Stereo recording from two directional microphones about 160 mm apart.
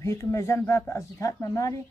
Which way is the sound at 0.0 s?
15° left (ahead or behind).